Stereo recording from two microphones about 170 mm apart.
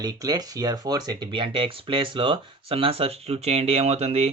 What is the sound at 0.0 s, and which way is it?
Speech, 25° right (ahead or behind).